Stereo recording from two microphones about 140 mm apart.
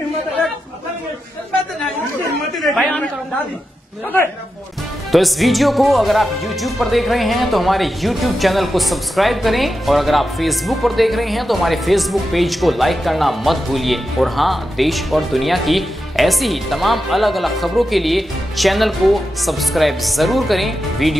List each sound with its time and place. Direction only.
2.5 s chatter: centre (ahead or behind)
5.1 s speech: centre (ahead or behind)